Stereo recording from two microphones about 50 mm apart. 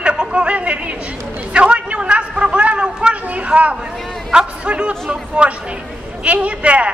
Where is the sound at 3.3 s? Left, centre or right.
Right.